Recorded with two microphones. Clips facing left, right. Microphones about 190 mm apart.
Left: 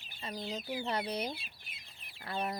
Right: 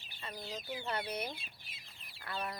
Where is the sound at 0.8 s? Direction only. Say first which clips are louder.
Left 2 dB; 35° left (ahead or behind).